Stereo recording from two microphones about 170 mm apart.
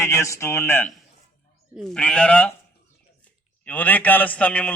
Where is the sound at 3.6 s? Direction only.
10° left (ahead or behind).